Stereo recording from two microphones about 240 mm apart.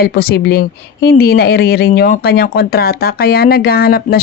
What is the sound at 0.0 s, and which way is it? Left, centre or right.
Speech, left.